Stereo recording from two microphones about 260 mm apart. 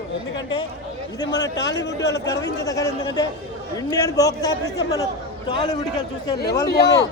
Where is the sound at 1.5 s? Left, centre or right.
Left.